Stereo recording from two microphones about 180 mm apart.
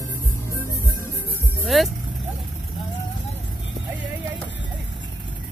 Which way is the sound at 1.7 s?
Centre (ahead or behind).